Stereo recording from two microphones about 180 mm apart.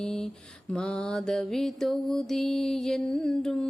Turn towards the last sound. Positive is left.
turn(degrees=5)  # may be behind; listen again after turning